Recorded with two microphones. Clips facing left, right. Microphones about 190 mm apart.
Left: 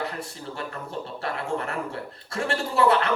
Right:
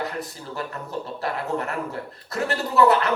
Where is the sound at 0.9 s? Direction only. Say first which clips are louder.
Right 3 dB; 30° left (ahead or behind).